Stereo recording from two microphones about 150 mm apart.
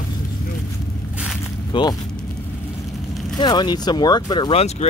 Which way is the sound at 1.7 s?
30° left (ahead or behind).